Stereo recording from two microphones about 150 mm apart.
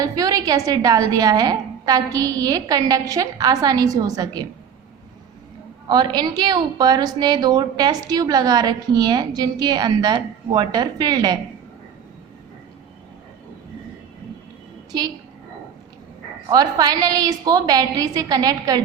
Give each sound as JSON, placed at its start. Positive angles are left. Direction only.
{"t": 0.0, "sound": "a woman's voice", "side_deg": -25}
{"t": 5.9, "sound": "a woman's voice", "side_deg": -30}
{"t": 16.5, "sound": "a woman's voice", "side_deg": -25}